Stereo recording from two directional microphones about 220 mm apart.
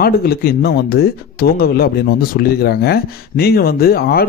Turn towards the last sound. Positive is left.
turn(degrees=45)  # may be behind; listen again after turning